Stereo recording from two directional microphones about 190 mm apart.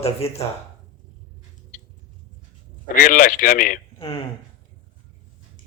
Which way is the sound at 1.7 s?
45° left (ahead or behind).